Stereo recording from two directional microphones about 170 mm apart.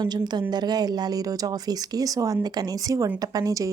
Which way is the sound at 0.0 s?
25° right (ahead or behind).